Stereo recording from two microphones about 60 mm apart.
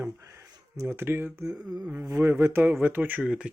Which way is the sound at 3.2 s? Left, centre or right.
Centre.